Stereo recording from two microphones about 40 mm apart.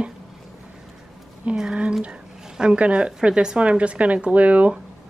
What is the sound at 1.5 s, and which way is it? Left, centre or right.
A woman's voice, right.